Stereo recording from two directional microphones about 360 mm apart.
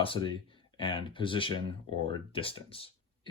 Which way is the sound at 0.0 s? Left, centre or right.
Centre.